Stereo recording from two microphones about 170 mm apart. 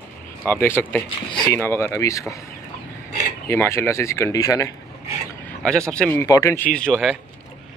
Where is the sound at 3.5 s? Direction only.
15° left (ahead or behind).